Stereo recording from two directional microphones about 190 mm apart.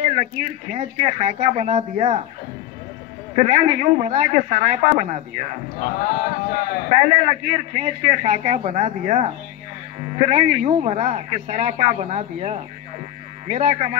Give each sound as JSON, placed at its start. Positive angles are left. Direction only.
{"t": 0.7, "sound": "a man's voice", "side_deg": -40}
{"t": 3.3, "sound": "a man's voice", "side_deg": -40}
{"t": 5.8, "sound": "speech", "side_deg": 55}
{"t": 6.9, "sound": "a man's voice", "side_deg": -40}